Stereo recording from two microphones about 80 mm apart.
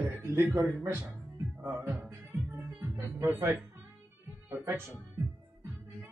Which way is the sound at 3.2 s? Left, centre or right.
Right.